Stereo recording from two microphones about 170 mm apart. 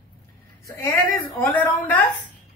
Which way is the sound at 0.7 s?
20° left (ahead or behind).